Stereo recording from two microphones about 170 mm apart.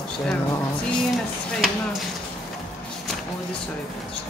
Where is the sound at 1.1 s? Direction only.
Centre (ahead or behind).